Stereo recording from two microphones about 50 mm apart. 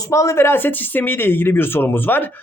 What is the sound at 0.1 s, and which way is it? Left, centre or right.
Speech, left.